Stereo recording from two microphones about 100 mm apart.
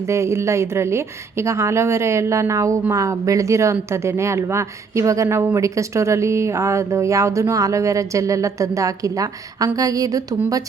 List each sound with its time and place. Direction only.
0.1 s a woman's voice: 30° right (ahead or behind)